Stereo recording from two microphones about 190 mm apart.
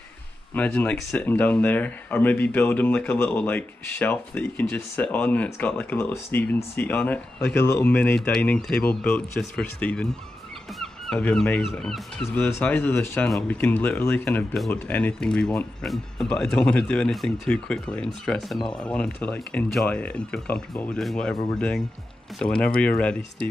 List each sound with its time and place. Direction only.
0.6 s speech: 5° left (ahead or behind)
12.3 s speech: 15° left (ahead or behind)